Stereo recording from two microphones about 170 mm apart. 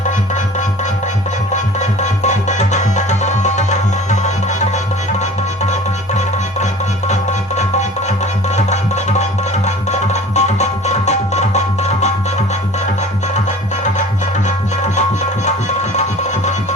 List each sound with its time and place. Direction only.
1.5 s music: 45° left (ahead or behind)
7.1 s music: 45° left (ahead or behind)